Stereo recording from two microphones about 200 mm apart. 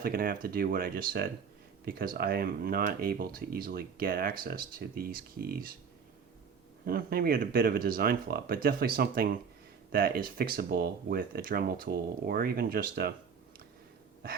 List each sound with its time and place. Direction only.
0.0 s speech: 45° right (ahead or behind)
6.8 s speech: 50° right (ahead or behind)